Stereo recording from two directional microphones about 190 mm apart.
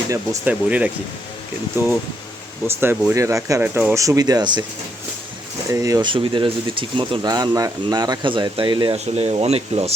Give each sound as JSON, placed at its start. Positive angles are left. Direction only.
{"t": 0.1, "sound": "speech", "side_deg": -10}
{"t": 2.6, "sound": "speech", "side_deg": -10}
{"t": 5.7, "sound": "speech", "side_deg": -15}